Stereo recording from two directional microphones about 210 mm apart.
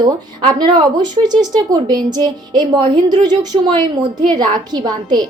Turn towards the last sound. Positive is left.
turn(degrees=-20)  # may be behind; listen again after turning